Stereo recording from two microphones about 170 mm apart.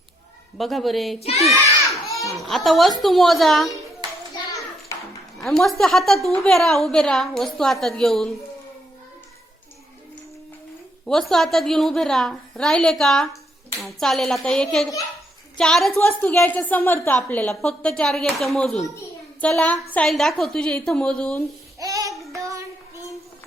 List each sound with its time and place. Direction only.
0.6 s a woman's voice: centre (ahead or behind)
1.2 s a child's voice: 35° left (ahead or behind)
2.0 s children playing: 20° left (ahead or behind)
2.3 s a woman's voice: centre (ahead or behind)
5.4 s a woman's voice: centre (ahead or behind)
11.0 s a woman's voice: centre (ahead or behind)
16.0 s a woman's voice: 15° left (ahead or behind)
21.8 s child singing: 20° right (ahead or behind)
22.1 s child singing: centre (ahead or behind)